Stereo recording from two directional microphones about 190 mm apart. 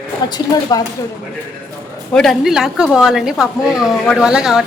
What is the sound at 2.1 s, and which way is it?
A woman's voice, centre (ahead or behind).